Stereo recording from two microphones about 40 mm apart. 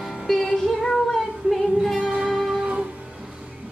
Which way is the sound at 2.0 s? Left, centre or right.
Right.